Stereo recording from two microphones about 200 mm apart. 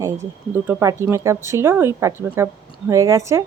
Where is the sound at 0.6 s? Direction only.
15° right (ahead or behind).